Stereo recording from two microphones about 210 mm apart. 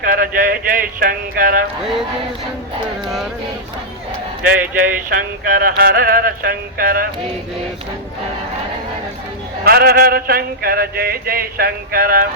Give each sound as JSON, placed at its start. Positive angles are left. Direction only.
{"t": 0.0, "sound": "speech", "side_deg": -40}
{"t": 4.4, "sound": "speech", "side_deg": -40}
{"t": 9.6, "sound": "speech", "side_deg": -50}